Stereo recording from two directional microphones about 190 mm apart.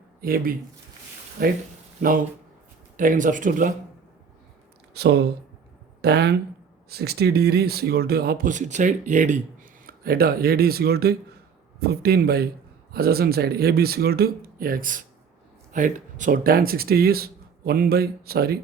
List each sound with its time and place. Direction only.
0.2 s speech: 50° right (ahead or behind)
4.9 s a man's voice: 60° right (ahead or behind)